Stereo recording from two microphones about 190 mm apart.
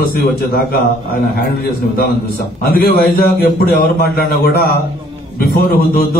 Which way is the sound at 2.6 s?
50° left (ahead or behind).